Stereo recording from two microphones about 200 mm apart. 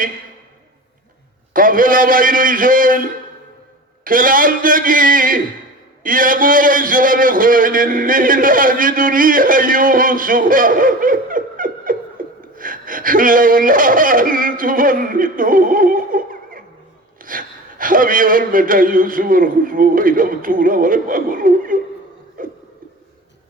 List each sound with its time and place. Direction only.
1.5 s a man's voice: 45° right (ahead or behind)
17.2 s a man's voice: 45° right (ahead or behind)
22.4 s a sound: 45° right (ahead or behind)